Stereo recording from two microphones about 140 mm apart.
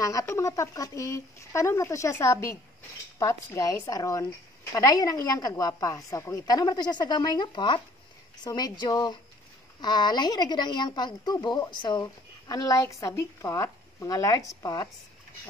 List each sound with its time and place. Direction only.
0.0 s speech: 25° left (ahead or behind)